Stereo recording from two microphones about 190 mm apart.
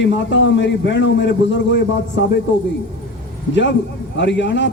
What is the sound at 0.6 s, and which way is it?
Speech, 70° left (ahead or behind).